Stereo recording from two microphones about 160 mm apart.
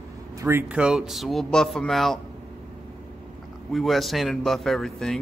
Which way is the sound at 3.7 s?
Centre (ahead or behind).